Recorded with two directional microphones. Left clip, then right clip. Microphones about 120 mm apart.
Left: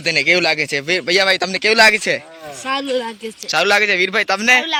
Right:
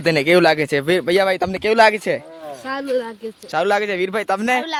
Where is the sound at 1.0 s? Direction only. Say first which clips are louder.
Left 2 dB; 40° right (ahead or behind).